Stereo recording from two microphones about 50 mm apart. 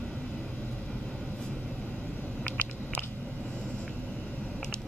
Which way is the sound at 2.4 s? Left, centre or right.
Left.